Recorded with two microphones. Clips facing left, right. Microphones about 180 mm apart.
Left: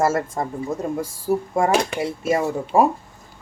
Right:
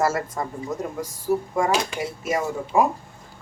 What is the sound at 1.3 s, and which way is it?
Speech, 35° left (ahead or behind).